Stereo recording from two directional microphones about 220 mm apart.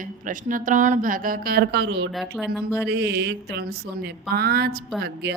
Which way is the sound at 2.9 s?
50° right (ahead or behind).